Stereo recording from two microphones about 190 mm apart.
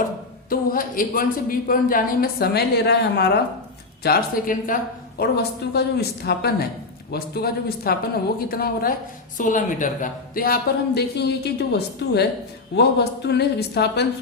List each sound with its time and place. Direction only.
0.5 s a woman's voice: 50° left (ahead or behind)
4.0 s a woman's voice: 50° left (ahead or behind)
5.2 s a woman's voice: 55° left (ahead or behind)